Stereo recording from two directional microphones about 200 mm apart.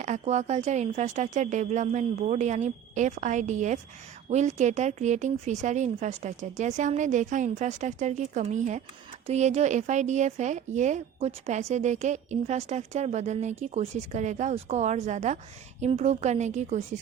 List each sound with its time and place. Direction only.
0.0 s a woman's voice: 35° right (ahead or behind)